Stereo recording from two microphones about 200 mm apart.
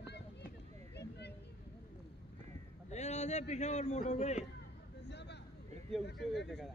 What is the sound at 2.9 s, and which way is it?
A man's voice, 35° left (ahead or behind).